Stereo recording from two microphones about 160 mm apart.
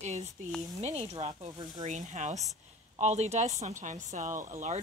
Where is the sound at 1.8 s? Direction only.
50° right (ahead or behind).